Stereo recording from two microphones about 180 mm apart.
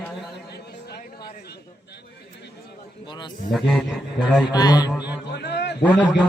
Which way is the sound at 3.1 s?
25° left (ahead or behind).